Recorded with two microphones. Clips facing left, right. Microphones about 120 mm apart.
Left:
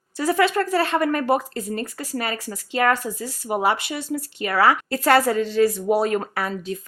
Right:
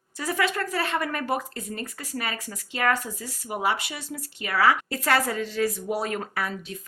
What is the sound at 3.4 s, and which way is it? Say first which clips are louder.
A woman's voice: left 5 dB; 65° left (ahead or behind).